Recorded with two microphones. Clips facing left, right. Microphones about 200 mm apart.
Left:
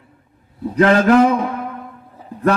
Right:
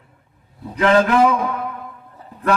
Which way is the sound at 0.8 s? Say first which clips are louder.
Left 3 dB; 40° left (ahead or behind).